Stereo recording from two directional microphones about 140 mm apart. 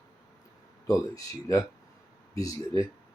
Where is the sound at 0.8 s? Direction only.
25° left (ahead or behind).